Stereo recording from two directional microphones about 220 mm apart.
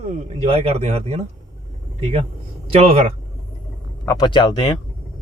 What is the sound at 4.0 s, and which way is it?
Speech, 15° left (ahead or behind).